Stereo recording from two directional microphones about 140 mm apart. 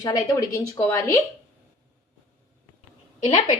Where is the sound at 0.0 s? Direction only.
25° left (ahead or behind).